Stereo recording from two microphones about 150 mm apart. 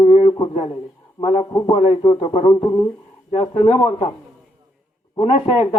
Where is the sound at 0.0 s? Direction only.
40° left (ahead or behind).